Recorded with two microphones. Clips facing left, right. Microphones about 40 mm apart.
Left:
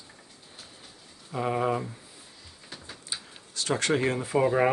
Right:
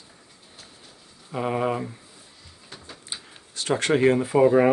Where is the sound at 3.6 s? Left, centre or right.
Right.